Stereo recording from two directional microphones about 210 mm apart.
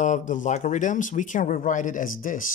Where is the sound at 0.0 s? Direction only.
35° left (ahead or behind).